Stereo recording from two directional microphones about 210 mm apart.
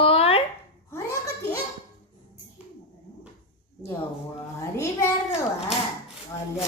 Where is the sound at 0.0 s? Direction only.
25° left (ahead or behind).